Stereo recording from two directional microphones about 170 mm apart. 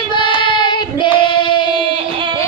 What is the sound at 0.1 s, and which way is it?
Child singing, 30° left (ahead or behind).